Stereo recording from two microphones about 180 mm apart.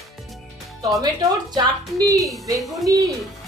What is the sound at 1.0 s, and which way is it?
Speech, 20° right (ahead or behind).